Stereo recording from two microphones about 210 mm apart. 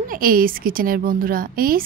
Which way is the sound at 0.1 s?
45° right (ahead or behind).